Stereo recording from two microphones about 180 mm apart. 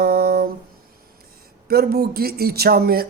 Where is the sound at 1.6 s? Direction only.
60° right (ahead or behind).